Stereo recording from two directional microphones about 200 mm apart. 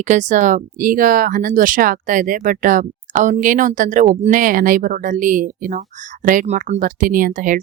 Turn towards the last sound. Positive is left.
turn(degrees=-40)  # may be behind; listen again after turning